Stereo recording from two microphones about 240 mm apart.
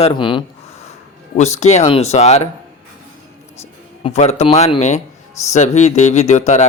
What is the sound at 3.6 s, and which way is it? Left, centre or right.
Speech, left.